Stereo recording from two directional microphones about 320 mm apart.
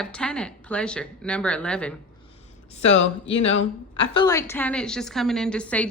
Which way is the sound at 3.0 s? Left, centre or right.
Left.